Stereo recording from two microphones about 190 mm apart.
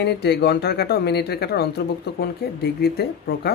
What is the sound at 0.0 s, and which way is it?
Speech, 60° left (ahead or behind).